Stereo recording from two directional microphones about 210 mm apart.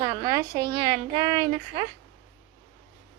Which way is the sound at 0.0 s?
20° right (ahead or behind).